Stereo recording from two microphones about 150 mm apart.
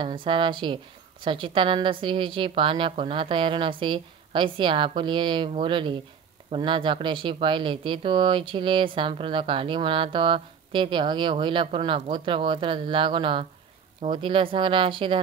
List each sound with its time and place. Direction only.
0.0 s speech: 35° right (ahead or behind)